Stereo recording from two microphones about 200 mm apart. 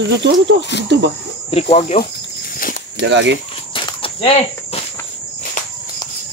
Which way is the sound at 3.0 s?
65° right (ahead or behind).